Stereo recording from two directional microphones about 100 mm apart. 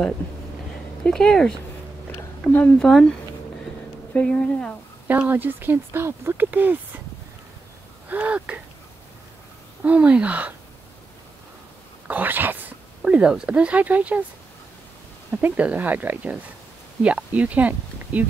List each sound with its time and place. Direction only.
1.0 s a woman's voice: 5° left (ahead or behind)
2.1 s a sound: 20° left (ahead or behind)
2.8 s speech: 5° left (ahead or behind)
4.1 s a woman's voice: 10° left (ahead or behind)
5.3 s speech: 20° right (ahead or behind)
8.1 s speech: 15° right (ahead or behind)
9.8 s speech: 10° right (ahead or behind)
12.1 s speech: 20° right (ahead or behind)
15.3 s speech: 15° right (ahead or behind)